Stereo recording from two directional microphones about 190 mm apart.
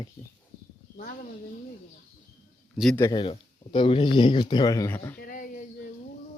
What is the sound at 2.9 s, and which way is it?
Speech, 20° left (ahead or behind).